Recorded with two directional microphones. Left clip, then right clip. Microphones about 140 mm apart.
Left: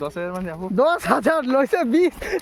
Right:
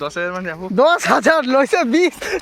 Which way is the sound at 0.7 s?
40° right (ahead or behind).